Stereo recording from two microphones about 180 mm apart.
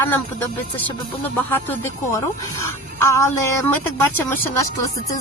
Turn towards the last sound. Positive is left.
turn(degrees=15)  # may be behind; listen again after turning